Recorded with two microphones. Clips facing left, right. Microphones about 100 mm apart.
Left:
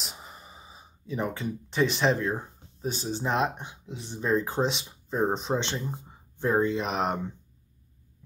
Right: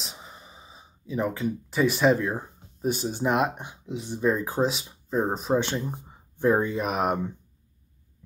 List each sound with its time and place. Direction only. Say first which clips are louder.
0.0 s speech: right 1 dB; centre (ahead or behind)